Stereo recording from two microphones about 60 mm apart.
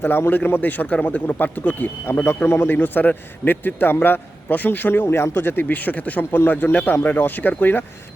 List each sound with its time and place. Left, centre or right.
0.0 s a man's voice: left
2.0 s a man's voice: left
2.6 s a man's voice: left
5.0 s a man's voice: left